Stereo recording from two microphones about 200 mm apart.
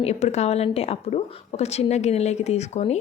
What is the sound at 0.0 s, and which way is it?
A woman's voice, 30° left (ahead or behind).